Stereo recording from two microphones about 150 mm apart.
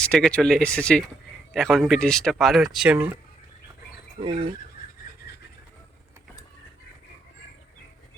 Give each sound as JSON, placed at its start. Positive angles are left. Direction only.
{"t": 0.0, "sound": "speech", "side_deg": 5}
{"t": 4.2, "sound": "speech", "side_deg": -35}